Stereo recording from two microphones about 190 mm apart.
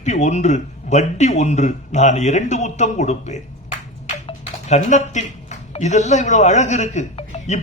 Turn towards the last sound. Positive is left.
turn(degrees=40)  # may be behind; listen again after turning